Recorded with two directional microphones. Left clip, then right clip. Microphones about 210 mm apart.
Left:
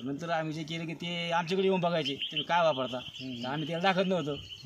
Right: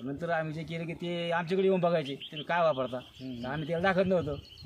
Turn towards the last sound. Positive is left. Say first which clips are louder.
# right 1 dB
turn(degrees=-20)  # may be behind; listen again after turning